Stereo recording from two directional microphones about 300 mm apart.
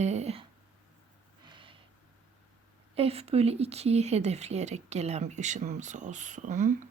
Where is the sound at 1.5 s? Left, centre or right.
Centre.